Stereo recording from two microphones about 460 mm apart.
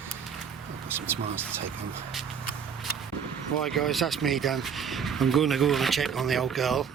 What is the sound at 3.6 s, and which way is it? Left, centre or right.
Speech, centre.